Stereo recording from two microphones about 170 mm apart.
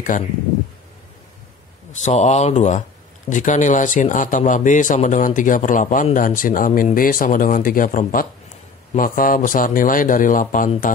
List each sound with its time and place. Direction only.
1.9 s speech: 45° left (ahead or behind)